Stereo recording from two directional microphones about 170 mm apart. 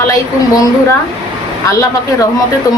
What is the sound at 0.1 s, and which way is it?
Speech, 20° left (ahead or behind).